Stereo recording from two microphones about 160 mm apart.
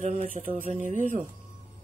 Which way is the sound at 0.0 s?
45° right (ahead or behind).